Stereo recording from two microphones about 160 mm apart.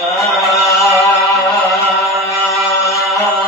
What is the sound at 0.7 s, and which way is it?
Music, 20° left (ahead or behind).